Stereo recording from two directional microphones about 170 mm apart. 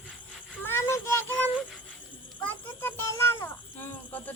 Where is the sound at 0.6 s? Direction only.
15° left (ahead or behind).